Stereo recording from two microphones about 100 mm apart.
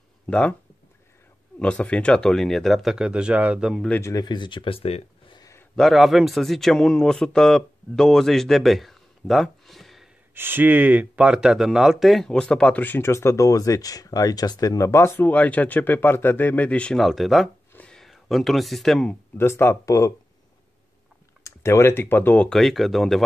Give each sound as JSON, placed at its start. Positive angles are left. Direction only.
{"t": 0.3, "sound": "speech", "side_deg": 10}
{"t": 1.6, "sound": "speech", "side_deg": 10}
{"t": 4.2, "sound": "speech", "side_deg": 50}
{"t": 5.8, "sound": "a man's voice", "side_deg": 0}
{"t": 10.3, "sound": "speech", "side_deg": -20}
{"t": 17.7, "sound": "a sound", "side_deg": 5}
{"t": 19.3, "sound": "speech", "side_deg": 25}
{"t": 21.5, "sound": "speech", "side_deg": 30}
{"t": 22.5, "sound": "speech", "side_deg": 0}